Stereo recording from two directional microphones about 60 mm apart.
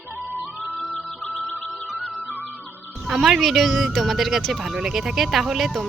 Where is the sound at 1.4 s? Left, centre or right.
Centre.